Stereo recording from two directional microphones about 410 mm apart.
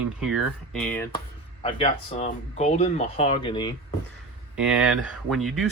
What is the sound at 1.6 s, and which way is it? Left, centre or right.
Speech, centre.